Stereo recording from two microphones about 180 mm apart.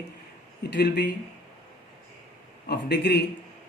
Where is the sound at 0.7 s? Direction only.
65° left (ahead or behind).